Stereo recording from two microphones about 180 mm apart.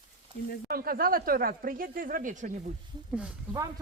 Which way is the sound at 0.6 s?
55° right (ahead or behind).